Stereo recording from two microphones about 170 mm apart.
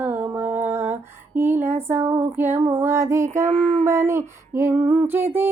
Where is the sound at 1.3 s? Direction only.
15° right (ahead or behind).